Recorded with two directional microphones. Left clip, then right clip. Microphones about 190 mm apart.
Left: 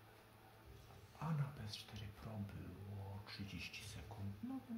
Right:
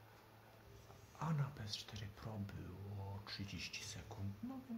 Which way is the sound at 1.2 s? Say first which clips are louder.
Right 3 dB; 35° right (ahead or behind).